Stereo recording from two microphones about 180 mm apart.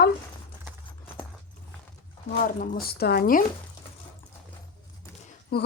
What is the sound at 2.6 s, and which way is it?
Speech, 55° left (ahead or behind).